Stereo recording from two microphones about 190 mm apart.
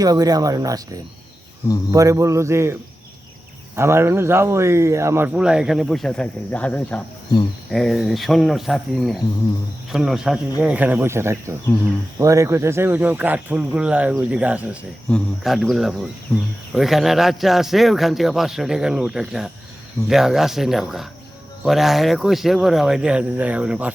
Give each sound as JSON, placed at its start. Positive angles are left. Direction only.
{"t": 0.0, "sound": "speech", "side_deg": -20}
{"t": 3.8, "sound": "a man's voice", "side_deg": -15}
{"t": 11.6, "sound": "speech", "side_deg": 10}
{"t": 12.2, "sound": "a man's voice", "side_deg": -15}